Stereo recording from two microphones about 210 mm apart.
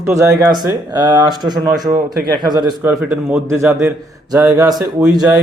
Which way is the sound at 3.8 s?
15° right (ahead or behind).